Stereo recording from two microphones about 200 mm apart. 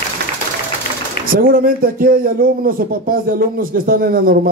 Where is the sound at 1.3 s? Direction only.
45° right (ahead or behind).